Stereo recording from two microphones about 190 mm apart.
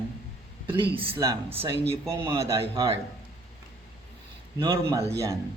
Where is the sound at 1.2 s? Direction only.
15° right (ahead or behind).